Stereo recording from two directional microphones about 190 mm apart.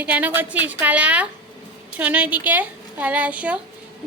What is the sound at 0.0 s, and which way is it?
A woman's voice, 10° right (ahead or behind).